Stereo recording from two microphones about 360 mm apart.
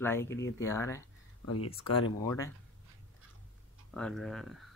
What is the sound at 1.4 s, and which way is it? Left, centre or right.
Speech, left.